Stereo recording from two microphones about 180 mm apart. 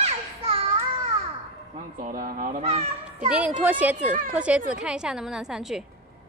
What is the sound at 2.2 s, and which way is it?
Speech, 50° right (ahead or behind).